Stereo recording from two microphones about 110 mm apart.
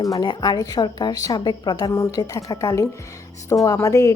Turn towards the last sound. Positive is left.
turn(degrees=30)  # may be behind; listen again after turning